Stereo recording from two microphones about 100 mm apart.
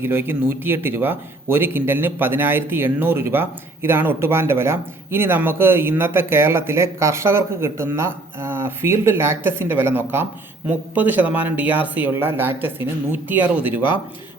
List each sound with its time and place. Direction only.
0.0 s speech: 20° right (ahead or behind)